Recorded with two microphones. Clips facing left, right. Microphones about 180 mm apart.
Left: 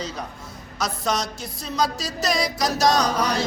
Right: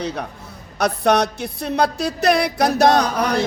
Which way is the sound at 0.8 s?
60° right (ahead or behind).